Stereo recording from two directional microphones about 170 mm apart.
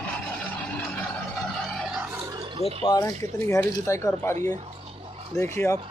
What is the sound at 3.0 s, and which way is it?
Speech, 15° left (ahead or behind).